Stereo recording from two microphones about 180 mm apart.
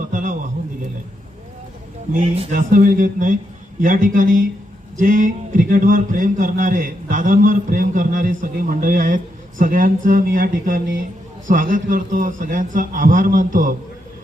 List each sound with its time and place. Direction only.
0.1 s a sound: 45° right (ahead or behind)
2.1 s a man's voice: 35° right (ahead or behind)
2.5 s a man's voice: 50° right (ahead or behind)